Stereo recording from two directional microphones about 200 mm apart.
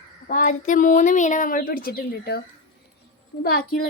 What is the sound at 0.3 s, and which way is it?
Speech, 40° left (ahead or behind).